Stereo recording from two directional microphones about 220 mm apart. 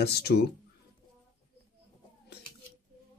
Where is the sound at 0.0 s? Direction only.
50° left (ahead or behind).